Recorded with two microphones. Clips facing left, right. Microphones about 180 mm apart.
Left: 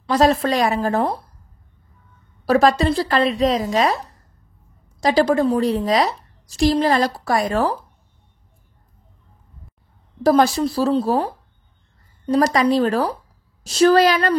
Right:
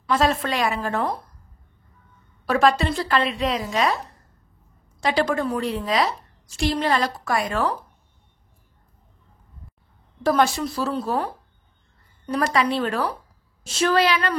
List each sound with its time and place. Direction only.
0.0 s a woman's voice: 35° left (ahead or behind)
2.4 s a woman's voice: 35° left (ahead or behind)
5.0 s a woman's voice: 35° left (ahead or behind)
10.2 s a woman's voice: 35° left (ahead or behind)
12.3 s a woman's voice: 35° left (ahead or behind)